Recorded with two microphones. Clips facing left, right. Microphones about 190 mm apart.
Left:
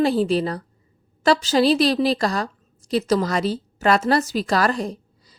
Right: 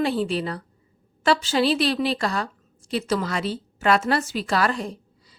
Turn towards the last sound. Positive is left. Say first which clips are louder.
# left 4 dB
turn(degrees=40)  # may be behind; listen again after turning